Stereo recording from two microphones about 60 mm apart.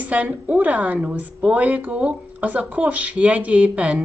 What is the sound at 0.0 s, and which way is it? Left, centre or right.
Speech, right.